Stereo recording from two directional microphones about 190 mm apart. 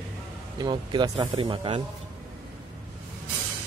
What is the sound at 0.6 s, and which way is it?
Speech, 20° right (ahead or behind).